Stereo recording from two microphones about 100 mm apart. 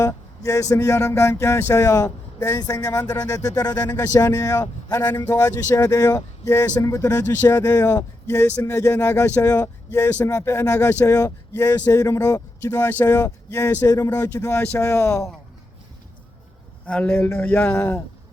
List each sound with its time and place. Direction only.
0.1 s speech: 35° left (ahead or behind)
7.2 s speech: 20° left (ahead or behind)
7.4 s speech: 35° left (ahead or behind)
16.8 s speech: 15° left (ahead or behind)
17.1 s speech: 25° left (ahead or behind)